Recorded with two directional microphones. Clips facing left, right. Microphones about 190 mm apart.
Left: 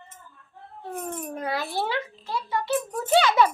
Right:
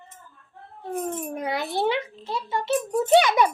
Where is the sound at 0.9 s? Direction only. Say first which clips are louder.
Right 4 dB; 15° right (ahead or behind).